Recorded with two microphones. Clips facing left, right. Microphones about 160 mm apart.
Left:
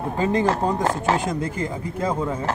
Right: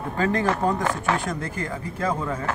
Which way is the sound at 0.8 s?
30° left (ahead or behind).